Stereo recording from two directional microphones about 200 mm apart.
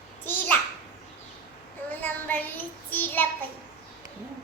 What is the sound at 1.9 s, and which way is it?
Child singing, 10° left (ahead or behind).